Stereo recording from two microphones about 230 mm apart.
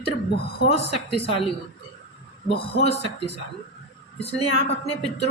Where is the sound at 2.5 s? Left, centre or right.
Left.